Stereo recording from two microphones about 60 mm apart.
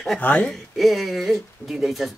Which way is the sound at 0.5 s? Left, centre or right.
Centre.